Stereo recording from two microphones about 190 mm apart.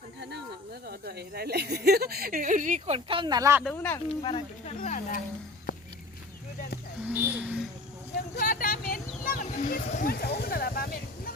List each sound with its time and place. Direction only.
0.9 s speech: 55° right (ahead or behind); by 3.6 s 20° right (ahead or behind)
3.6 s speech: 5° left (ahead or behind)
4.2 s speech: 25° left (ahead or behind)
4.6 s speech: 45° left (ahead or behind)
7.0 s a child's voice: 10° right (ahead or behind)
8.4 s a sound: 50° left (ahead or behind)